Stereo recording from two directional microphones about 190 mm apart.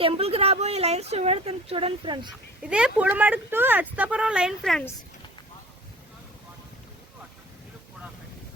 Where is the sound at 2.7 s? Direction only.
5° right (ahead or behind).